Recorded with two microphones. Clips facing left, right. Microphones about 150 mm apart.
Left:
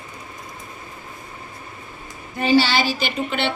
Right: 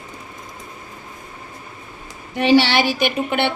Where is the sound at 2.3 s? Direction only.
75° right (ahead or behind).